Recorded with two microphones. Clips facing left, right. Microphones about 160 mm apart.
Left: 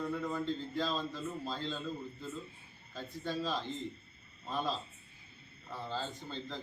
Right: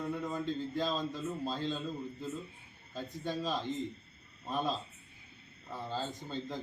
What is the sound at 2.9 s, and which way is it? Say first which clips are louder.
Speech: right 1 dB; 15° right (ahead or behind).